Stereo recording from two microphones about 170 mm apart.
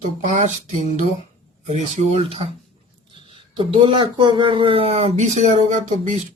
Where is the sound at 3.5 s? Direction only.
30° right (ahead or behind).